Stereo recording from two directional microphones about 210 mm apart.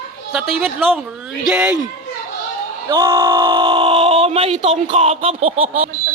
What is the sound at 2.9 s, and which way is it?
Speech, 15° right (ahead or behind).